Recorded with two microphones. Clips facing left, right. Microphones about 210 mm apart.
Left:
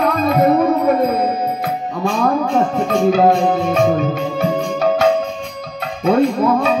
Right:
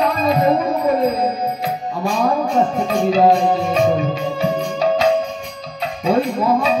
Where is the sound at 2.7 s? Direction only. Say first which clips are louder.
Left 2 dB; 55° left (ahead or behind).